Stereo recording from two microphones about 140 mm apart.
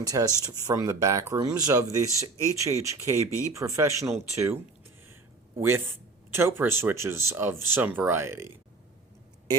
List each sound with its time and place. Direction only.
0.0 s speech: 25° right (ahead or behind)